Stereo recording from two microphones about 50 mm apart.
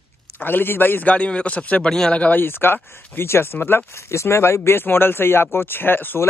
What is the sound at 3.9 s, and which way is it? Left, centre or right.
Speech, left.